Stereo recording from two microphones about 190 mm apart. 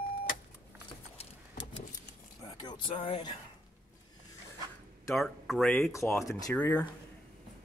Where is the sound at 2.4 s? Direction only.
20° left (ahead or behind).